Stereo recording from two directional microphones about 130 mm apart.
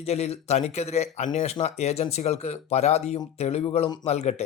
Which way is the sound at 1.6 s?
55° left (ahead or behind).